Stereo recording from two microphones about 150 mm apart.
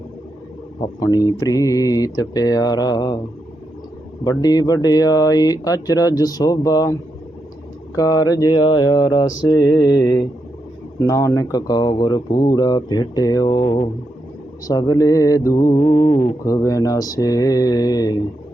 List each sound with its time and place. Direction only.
0.9 s mantra: 25° left (ahead or behind)
4.2 s mantra: 25° left (ahead or behind)
7.9 s mantra: 25° left (ahead or behind)
14.7 s mantra: 25° left (ahead or behind)